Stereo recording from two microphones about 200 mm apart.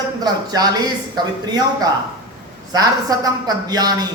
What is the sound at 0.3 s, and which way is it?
A woman's voice, 20° right (ahead or behind).